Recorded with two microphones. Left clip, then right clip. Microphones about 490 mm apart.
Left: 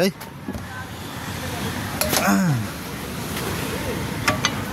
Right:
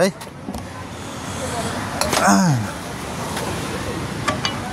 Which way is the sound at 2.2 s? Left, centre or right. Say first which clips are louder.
Right 7 dB; left.